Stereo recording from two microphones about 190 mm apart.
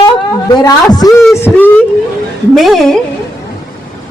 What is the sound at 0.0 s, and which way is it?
A woman's voice, 20° left (ahead or behind).